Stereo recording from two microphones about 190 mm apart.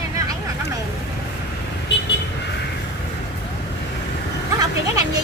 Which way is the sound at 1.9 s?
65° left (ahead or behind).